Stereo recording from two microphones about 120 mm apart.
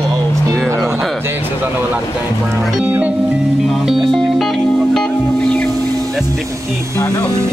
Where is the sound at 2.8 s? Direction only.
10° right (ahead or behind).